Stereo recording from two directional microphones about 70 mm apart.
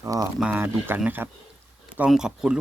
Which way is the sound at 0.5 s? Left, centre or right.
Right.